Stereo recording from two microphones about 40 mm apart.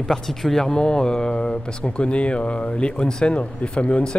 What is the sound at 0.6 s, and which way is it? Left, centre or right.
Speech, centre.